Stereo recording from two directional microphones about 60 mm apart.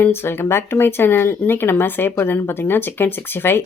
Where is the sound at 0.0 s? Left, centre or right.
Left.